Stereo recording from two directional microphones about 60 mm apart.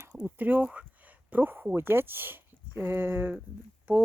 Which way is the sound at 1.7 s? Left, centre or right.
Right.